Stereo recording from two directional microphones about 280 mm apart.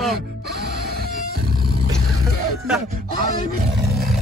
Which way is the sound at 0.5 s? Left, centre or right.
Right.